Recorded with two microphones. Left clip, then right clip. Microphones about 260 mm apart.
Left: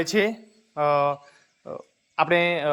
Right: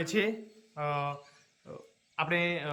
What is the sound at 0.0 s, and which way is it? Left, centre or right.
Speech, centre.